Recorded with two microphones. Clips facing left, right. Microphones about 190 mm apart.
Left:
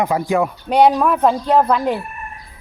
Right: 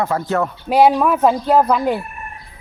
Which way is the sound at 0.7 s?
5° right (ahead or behind).